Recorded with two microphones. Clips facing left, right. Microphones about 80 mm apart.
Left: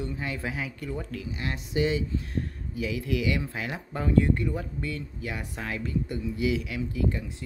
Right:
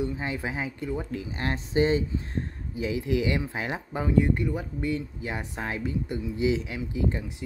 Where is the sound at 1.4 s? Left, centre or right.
Right.